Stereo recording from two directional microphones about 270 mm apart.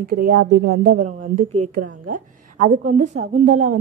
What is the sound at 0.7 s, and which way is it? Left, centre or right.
Speech, right.